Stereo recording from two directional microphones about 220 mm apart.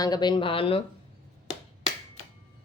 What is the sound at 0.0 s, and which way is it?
Speech, 20° left (ahead or behind).